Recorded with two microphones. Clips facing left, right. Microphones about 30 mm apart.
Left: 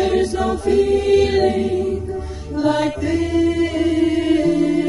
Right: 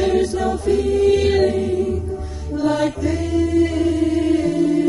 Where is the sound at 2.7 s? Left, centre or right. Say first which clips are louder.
Left 1 dB; centre.